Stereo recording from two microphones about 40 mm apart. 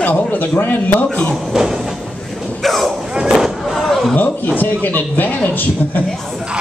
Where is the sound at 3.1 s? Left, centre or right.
Centre.